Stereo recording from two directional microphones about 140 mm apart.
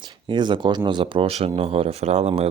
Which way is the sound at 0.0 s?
35° right (ahead or behind).